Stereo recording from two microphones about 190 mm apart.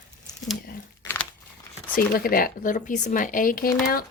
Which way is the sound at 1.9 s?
50° left (ahead or behind).